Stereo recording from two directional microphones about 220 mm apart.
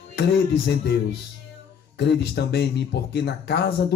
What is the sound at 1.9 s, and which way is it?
Speech, 50° left (ahead or behind).